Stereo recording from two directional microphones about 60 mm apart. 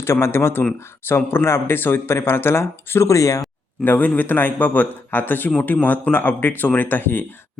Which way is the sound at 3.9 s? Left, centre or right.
Left.